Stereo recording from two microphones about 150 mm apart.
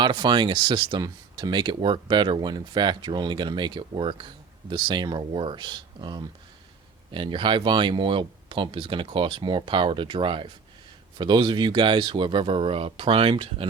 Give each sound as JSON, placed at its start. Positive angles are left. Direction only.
{"t": 0.0, "sound": "speech", "side_deg": -30}